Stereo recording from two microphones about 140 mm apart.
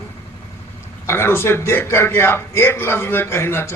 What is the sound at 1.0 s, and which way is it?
A man's voice, 15° left (ahead or behind).